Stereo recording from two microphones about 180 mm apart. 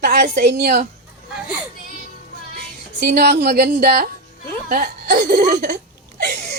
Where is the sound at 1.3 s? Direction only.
5° right (ahead or behind).